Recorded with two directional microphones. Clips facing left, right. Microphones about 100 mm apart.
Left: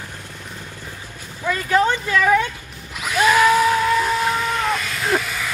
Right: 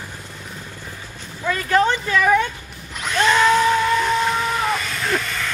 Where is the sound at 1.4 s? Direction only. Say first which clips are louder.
Even; 5° left (ahead or behind).